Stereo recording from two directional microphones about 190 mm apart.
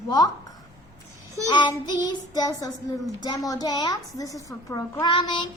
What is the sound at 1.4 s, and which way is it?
A woman's voice, 20° left (ahead or behind).